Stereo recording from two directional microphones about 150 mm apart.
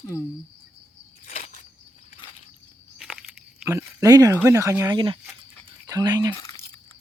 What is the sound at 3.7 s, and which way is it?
Speech, 15° right (ahead or behind).